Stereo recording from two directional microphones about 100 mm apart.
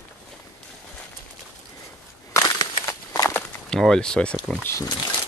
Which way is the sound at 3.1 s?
30° left (ahead or behind).